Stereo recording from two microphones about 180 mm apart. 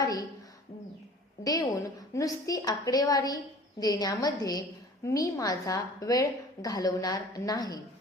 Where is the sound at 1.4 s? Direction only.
20° left (ahead or behind).